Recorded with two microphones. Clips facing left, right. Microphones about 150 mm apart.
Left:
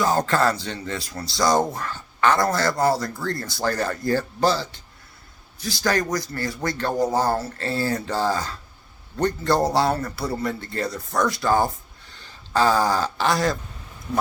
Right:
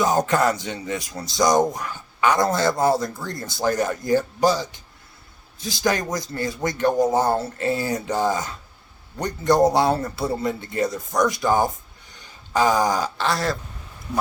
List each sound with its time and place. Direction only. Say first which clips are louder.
0.0 s a man's voice: right 1 dB; 20° right (ahead or behind)
13.1 s speech: left 2 dB; centre (ahead or behind)